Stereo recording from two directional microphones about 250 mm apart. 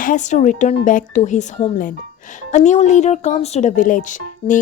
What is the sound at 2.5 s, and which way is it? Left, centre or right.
A woman's voice, left.